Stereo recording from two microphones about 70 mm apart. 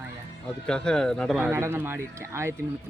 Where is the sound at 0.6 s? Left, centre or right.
Centre.